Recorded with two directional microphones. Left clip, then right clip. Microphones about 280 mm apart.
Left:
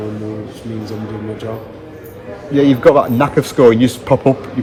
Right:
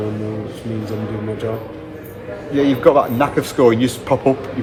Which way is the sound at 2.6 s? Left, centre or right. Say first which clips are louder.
Left 3 dB; left.